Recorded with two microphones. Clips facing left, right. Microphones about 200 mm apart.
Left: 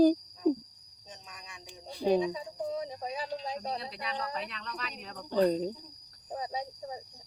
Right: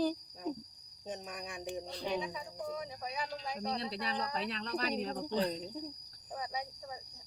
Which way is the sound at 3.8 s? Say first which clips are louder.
Even; 30° right (ahead or behind).